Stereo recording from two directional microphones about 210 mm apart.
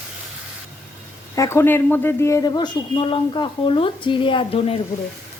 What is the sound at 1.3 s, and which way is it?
A woman's voice, 15° left (ahead or behind).